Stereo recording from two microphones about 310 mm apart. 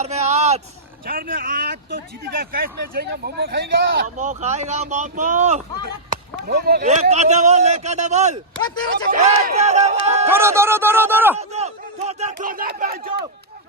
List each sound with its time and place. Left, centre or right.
0.0 s vehicle: right
1.0 s speech: right
10.2 s speech: centre
11.3 s speech: right